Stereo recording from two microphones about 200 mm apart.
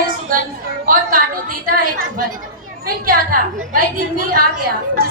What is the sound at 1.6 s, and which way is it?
Speech, 45° right (ahead or behind).